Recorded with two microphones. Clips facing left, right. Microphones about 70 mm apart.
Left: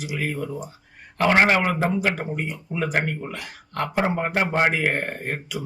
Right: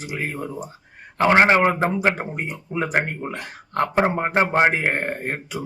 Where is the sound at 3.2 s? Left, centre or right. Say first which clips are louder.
Right 3 dB; right.